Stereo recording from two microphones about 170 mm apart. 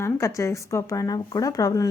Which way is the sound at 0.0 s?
15° left (ahead or behind).